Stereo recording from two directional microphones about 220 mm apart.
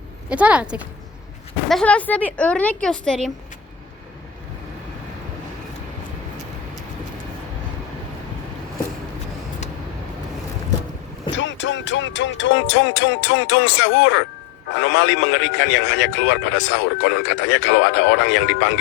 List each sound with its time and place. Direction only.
0.3 s a woman's voice: 5° right (ahead or behind)
1.7 s a woman's voice: 5° left (ahead or behind)
11.3 s a man's voice: 55° left (ahead or behind)